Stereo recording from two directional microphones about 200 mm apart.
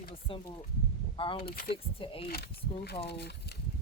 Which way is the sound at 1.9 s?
25° left (ahead or behind).